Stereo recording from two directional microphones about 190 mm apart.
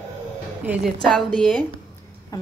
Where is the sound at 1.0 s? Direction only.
5° left (ahead or behind).